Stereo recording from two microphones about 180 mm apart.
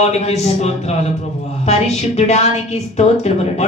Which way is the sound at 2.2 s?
35° left (ahead or behind).